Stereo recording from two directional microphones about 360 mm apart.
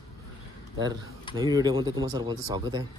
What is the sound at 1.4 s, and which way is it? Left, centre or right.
Speech, centre.